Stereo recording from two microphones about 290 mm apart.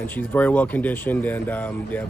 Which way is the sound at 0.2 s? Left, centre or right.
Centre.